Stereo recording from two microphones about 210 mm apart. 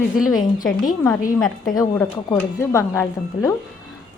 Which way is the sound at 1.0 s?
15° left (ahead or behind).